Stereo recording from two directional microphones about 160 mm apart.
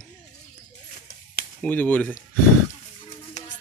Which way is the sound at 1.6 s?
10° left (ahead or behind).